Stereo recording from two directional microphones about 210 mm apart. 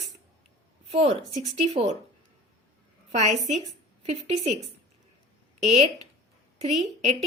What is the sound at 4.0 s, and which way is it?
Speech, 30° right (ahead or behind).